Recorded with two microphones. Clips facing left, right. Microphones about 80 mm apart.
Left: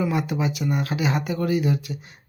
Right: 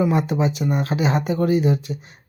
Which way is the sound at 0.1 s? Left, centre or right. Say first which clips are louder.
Right 4 dB; right.